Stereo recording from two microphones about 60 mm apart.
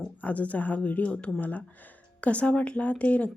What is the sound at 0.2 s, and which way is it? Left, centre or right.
Speech, left.